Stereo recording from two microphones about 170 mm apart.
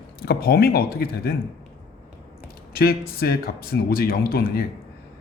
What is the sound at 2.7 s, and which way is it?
Speech, 65° left (ahead or behind).